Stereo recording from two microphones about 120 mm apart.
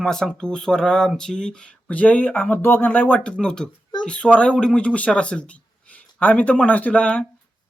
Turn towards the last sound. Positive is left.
turn(degrees=10)  # may be behind; listen again after turning